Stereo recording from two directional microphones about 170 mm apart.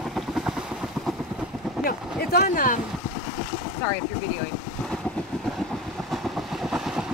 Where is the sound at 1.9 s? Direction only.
60° left (ahead or behind).